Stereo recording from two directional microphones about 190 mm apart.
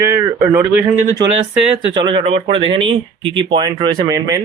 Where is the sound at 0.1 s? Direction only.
15° right (ahead or behind).